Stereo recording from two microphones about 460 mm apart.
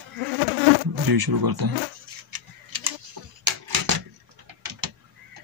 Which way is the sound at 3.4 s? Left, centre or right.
Right.